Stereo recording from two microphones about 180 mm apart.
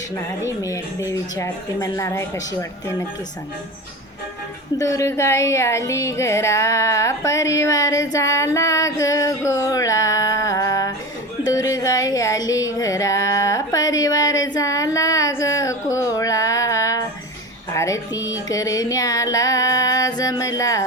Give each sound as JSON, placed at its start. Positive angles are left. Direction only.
{"t": 0.4, "sound": "speech", "side_deg": 15}
{"t": 4.8, "sound": "speech", "side_deg": 15}
{"t": 11.4, "sound": "a sound", "side_deg": 20}
{"t": 17.7, "sound": "music", "side_deg": 20}